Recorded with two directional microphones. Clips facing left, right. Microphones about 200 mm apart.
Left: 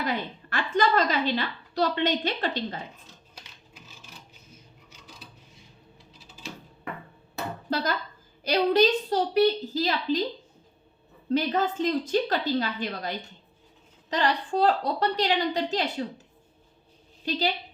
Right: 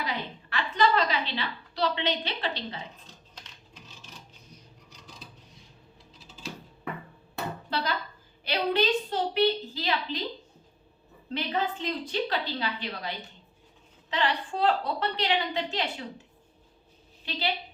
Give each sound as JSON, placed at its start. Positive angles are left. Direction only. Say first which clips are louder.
{"t": 0.0, "sound": "a sound", "louder": "left 4 dB", "side_deg": 50}
{"t": 7.7, "sound": "dishes", "louder": "left 4 dB", "side_deg": 45}
{"t": 8.4, "sound": "a woman's voice", "louder": "left 5 dB", "side_deg": 40}
{"t": 11.3, "sound": "a woman's voice", "louder": "left 5 dB", "side_deg": 45}
{"t": 17.2, "sound": "a woman's voice", "louder": "left 6 dB", "side_deg": 45}